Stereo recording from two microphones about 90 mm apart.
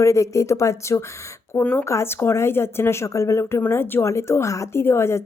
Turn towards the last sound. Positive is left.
turn(degrees=30)  # may be behind; listen again after turning